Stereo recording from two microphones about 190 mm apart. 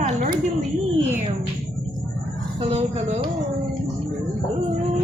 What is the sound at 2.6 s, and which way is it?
Speech, 35° right (ahead or behind).